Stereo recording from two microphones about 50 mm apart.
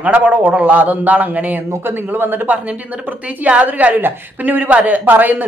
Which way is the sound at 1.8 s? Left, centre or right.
Right.